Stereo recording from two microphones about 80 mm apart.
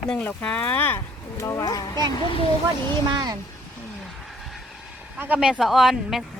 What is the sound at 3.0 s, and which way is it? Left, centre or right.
Speech, right.